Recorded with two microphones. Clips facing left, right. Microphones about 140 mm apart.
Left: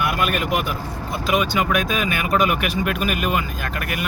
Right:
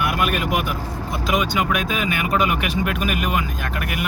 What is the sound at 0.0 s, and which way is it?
Vehicle, 5° right (ahead or behind).